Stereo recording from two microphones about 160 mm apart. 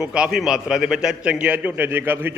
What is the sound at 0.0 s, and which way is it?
A man's voice, 5° right (ahead or behind).